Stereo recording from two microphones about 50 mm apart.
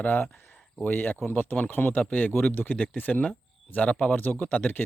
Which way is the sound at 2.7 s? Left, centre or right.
Left.